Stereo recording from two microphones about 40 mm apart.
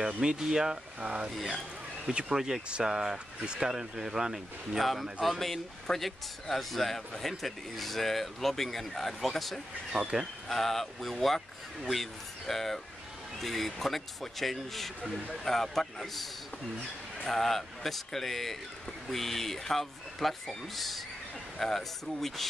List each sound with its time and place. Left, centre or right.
0.2 s speech: centre
1.3 s speech: centre
2.0 s speech: right
2.3 s speech: centre
5.2 s speech: centre
9.9 s speech: centre
10.5 s speech: centre
17.3 s speech: centre